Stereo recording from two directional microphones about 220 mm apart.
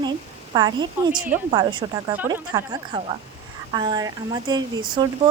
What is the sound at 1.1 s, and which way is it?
Speech, 5° right (ahead or behind).